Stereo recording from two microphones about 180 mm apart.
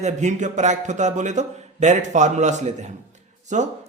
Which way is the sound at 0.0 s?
40° right (ahead or behind).